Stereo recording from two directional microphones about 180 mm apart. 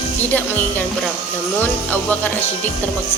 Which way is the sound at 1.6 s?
10° left (ahead or behind).